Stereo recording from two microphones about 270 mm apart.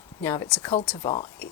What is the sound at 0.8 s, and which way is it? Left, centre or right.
Speech, centre.